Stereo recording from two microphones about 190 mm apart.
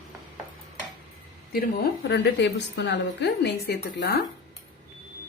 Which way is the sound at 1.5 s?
55° left (ahead or behind).